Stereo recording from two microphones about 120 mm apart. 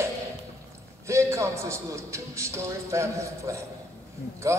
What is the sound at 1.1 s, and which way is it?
A man's voice, 25° right (ahead or behind).